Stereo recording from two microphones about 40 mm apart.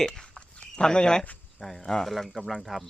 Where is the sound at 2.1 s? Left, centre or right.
Centre.